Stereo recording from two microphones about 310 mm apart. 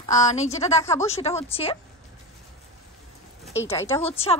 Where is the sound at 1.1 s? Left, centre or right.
Centre.